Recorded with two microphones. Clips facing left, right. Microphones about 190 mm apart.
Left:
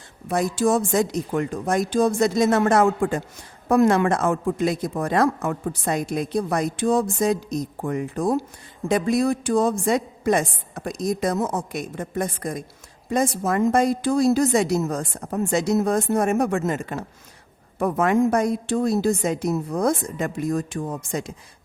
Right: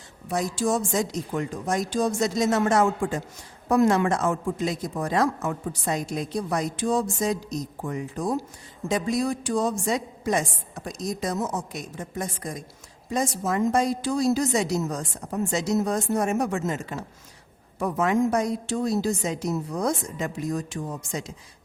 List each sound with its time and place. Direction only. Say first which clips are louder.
0.3 s speech: left 4 dB; 60° left (ahead or behind)